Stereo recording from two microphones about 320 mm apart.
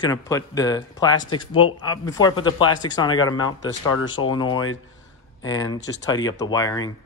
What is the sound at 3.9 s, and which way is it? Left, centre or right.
Speech, left.